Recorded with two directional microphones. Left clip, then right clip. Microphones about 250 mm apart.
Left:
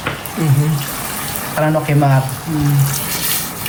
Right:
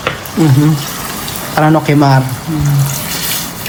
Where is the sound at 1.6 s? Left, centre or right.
Centre.